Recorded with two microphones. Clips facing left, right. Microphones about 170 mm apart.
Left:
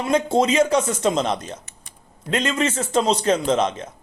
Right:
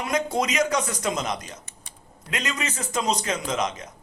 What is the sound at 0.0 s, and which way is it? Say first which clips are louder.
A man's voice: left 6 dB; 30° left (ahead or behind).